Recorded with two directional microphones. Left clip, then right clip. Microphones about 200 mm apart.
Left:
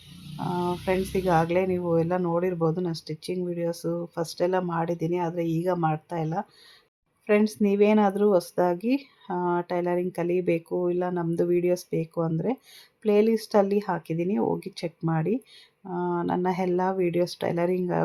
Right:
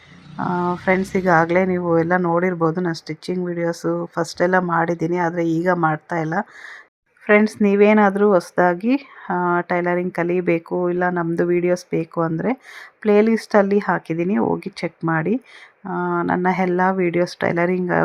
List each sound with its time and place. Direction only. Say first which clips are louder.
0.3 s speech: right 7 dB; 30° right (ahead or behind)